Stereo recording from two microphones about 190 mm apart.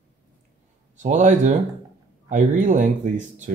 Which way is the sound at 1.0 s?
40° right (ahead or behind).